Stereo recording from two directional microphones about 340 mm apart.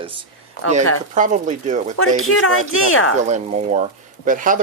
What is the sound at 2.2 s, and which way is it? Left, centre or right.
Speech, left.